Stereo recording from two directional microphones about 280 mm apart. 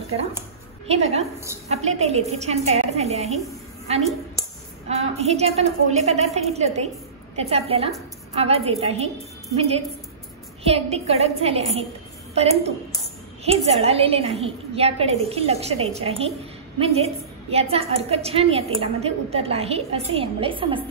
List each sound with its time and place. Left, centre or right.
0.8 s a woman's voice: right